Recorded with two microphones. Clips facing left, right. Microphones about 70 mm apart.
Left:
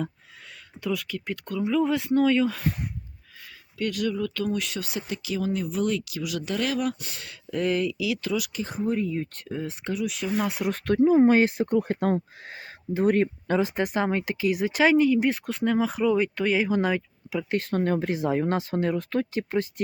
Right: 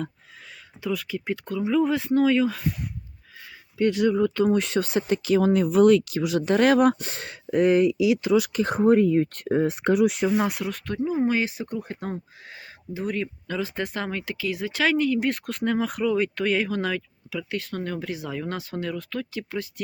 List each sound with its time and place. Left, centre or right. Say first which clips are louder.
0.8 s speech: right 1 dB; centre
3.8 s speech: right 6 dB; right
5.5 s speech: right 10 dB; right
6.1 s speech: right 7 dB; right
7.5 s speech: right 6 dB; right
8.5 s speech: right 8 dB; right
10.3 s speech: right 3 dB; centre
10.8 s speech: left 9 dB; left
11.2 s speech: left 5 dB; left
12.5 s speech: left 5 dB; left
13.2 s speech: left 5 dB; left
17.5 s speech: left 7 dB; left